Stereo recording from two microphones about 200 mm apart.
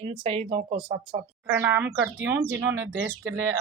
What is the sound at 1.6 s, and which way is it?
Speech, 10° right (ahead or behind).